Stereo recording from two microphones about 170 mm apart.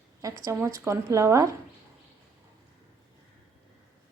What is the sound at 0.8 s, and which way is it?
Speech, 15° right (ahead or behind).